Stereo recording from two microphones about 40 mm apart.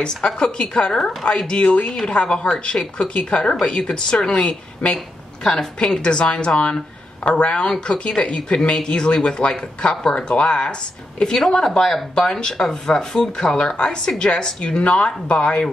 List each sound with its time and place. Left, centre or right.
0.1 s speech: centre
6.0 s speech: left